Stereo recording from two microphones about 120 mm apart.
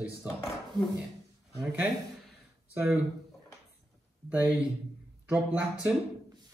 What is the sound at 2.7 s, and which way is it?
Speech, 20° right (ahead or behind).